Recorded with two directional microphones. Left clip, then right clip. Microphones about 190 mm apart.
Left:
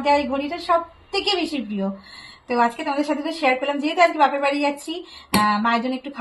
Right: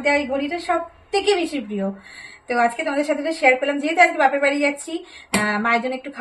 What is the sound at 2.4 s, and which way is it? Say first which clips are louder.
A woman's voice: right 1 dB; 25° right (ahead or behind).